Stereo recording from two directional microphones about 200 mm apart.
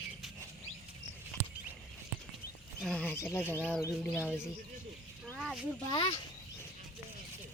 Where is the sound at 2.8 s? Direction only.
5° left (ahead or behind).